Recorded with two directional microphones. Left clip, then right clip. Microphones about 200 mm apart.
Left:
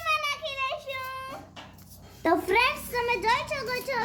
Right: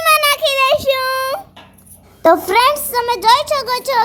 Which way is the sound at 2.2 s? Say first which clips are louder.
Right 12 dB; 35° right (ahead or behind).